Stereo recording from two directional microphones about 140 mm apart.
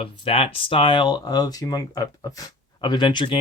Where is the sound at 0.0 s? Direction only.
40° left (ahead or behind).